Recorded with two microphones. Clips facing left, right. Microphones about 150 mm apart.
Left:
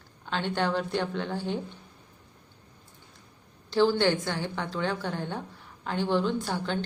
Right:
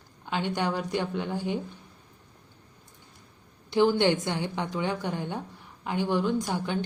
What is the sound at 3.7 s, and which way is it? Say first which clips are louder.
A woman's voice: right 1 dB; 15° right (ahead or behind).